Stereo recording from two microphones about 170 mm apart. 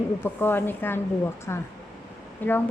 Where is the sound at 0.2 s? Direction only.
15° left (ahead or behind).